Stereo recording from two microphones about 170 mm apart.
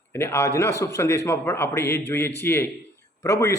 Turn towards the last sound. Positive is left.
turn(degrees=15)  # may be behind; listen again after turning